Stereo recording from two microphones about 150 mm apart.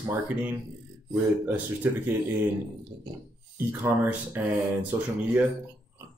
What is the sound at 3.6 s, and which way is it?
Speech, 15° right (ahead or behind).